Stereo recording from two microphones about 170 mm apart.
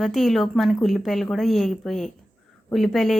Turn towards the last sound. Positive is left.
turn(degrees=0)  # may be behind; listen again after turning